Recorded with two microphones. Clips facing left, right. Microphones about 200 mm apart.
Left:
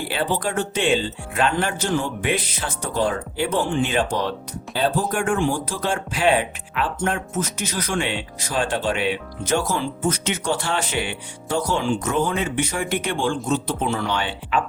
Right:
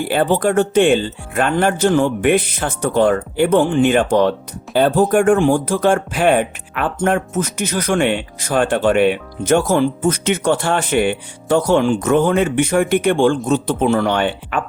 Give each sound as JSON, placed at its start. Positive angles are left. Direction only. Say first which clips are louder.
{"t": 0.1, "sound": "speech", "louder": "right 9 dB", "side_deg": -50}